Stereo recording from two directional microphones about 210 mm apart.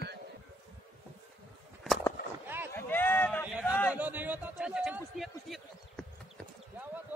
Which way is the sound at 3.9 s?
10° right (ahead or behind).